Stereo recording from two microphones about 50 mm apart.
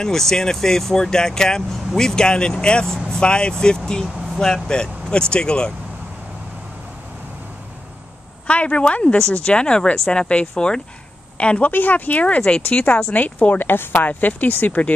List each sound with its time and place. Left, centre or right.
0.0 s speech: centre
8.5 s speech: left
11.7 s speech: left
13.6 s speech: left